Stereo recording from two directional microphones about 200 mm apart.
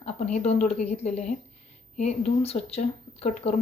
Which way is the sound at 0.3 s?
35° left (ahead or behind).